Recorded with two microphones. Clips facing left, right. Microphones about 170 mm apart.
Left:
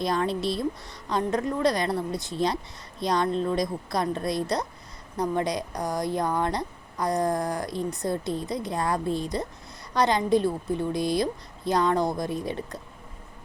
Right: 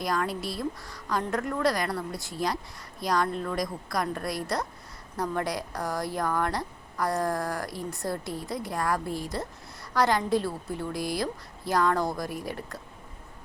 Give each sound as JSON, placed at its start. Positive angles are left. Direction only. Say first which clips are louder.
{"t": 0.0, "sound": "speech", "louder": "left 4 dB", "side_deg": 25}